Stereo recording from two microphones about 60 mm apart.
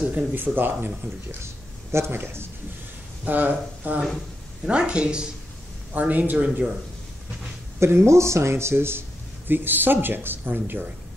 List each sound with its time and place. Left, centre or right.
0.1 s speech: right
1.4 s speech: right
3.3 s speech: right
7.8 s speech: right